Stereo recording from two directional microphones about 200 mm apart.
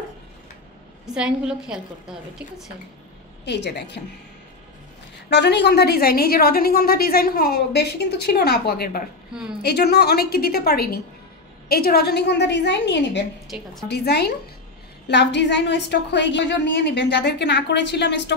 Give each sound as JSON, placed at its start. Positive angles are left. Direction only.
{"t": 1.0, "sound": "a woman's voice", "side_deg": -5}
{"t": 3.4, "sound": "a woman's voice", "side_deg": 60}
{"t": 5.3, "sound": "a woman's voice", "side_deg": 60}